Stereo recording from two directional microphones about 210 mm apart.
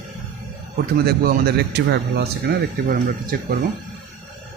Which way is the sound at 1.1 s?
45° right (ahead or behind).